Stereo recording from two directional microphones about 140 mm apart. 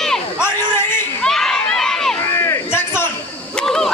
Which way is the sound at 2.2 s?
20° left (ahead or behind).